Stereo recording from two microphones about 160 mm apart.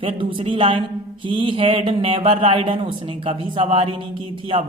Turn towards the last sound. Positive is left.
turn(degrees=-35)  # may be behind; listen again after turning